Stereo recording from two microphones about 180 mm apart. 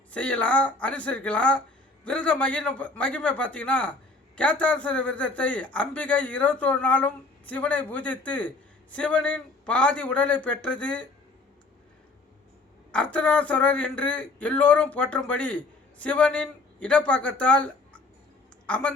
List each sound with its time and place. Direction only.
0.1 s a man's voice: 5° left (ahead or behind)
12.9 s a man's voice: 5° left (ahead or behind)